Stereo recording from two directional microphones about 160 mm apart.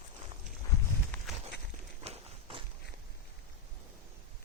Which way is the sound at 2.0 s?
40° right (ahead or behind).